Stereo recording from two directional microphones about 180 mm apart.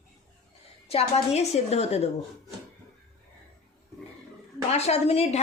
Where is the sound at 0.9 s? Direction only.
35° left (ahead or behind).